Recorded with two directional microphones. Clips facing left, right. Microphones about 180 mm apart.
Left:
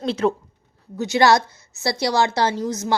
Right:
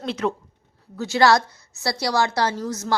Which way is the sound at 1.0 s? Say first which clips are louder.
Left 1 dB; 20° left (ahead or behind).